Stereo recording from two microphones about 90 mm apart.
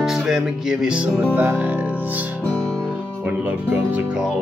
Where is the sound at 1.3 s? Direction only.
20° right (ahead or behind).